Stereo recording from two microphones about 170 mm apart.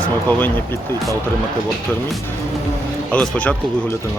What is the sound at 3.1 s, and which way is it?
Speech, 10° left (ahead or behind).